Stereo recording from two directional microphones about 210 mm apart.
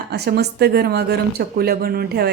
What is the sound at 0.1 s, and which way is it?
Speech, 50° right (ahead or behind).